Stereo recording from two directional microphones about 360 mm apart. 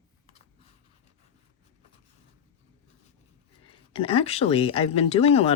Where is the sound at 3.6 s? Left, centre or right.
Centre.